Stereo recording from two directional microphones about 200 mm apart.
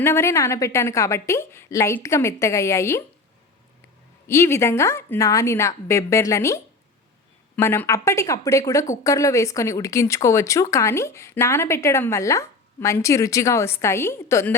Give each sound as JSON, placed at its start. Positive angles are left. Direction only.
{"t": 0.0, "sound": "speech", "side_deg": 10}
{"t": 4.3, "sound": "speech", "side_deg": 15}